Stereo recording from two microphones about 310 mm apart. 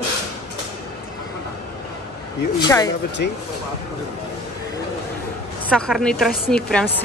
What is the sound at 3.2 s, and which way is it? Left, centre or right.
Speech, left.